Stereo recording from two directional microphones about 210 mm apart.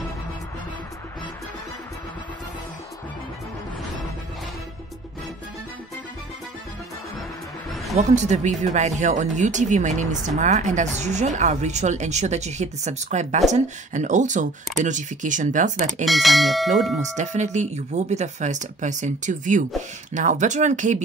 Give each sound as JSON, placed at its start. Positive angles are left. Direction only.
{"t": 7.9, "sound": "speech", "side_deg": -35}
{"t": 16.1, "sound": "bell", "side_deg": 0}
{"t": 17.0, "sound": "speech", "side_deg": -35}